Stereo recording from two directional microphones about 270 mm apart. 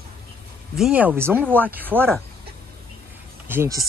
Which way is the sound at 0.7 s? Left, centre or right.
Centre.